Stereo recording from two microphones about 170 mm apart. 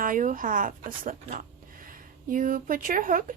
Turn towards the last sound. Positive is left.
turn(degrees=-55)  # may be behind; listen again after turning